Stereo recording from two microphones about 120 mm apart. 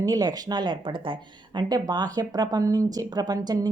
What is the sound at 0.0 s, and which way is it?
Speech, 30° right (ahead or behind).